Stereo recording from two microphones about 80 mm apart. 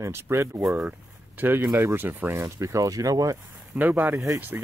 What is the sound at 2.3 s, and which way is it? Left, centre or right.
Speech, right.